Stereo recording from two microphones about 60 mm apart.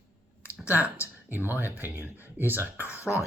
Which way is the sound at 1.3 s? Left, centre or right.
Right.